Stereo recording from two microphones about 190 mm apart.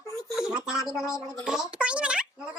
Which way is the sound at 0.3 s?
5° right (ahead or behind).